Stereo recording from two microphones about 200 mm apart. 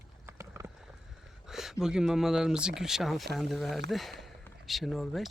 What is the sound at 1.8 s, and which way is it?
Speech, 5° right (ahead or behind).